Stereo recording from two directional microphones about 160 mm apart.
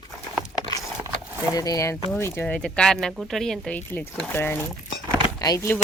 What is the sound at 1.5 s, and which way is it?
Speech, 20° left (ahead or behind).